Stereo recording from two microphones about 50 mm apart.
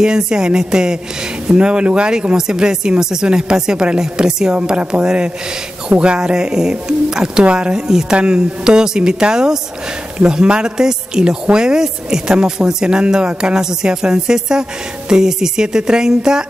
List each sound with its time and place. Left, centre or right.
0.0 s speech: centre